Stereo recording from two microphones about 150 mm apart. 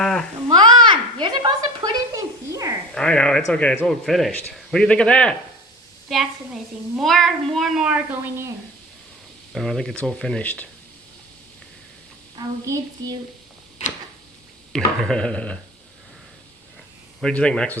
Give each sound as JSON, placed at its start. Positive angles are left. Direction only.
{"t": 0.0, "sound": "babbling", "side_deg": 5}
{"t": 0.4, "sound": "a sound", "side_deg": -30}
{"t": 2.9, "sound": "a man's voice", "side_deg": 5}
{"t": 9.6, "sound": "a child's voice", "side_deg": 5}
{"t": 12.4, "sound": "a woman's voice", "side_deg": -25}
{"t": 15.0, "sound": "a man's voice", "side_deg": 5}
{"t": 17.2, "sound": "a man's voice", "side_deg": 5}